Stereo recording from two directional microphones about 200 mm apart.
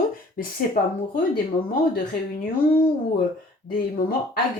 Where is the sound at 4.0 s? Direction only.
50° left (ahead or behind).